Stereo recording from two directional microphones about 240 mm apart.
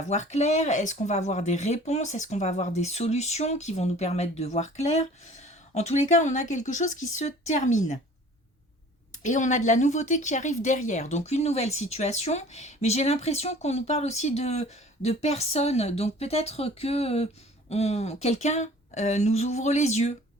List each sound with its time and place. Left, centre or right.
0.0 s speech: left
9.2 s speech: left